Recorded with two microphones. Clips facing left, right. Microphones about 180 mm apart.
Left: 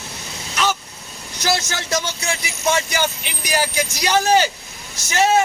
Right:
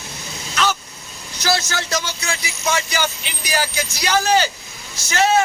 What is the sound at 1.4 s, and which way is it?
Speech, 20° left (ahead or behind).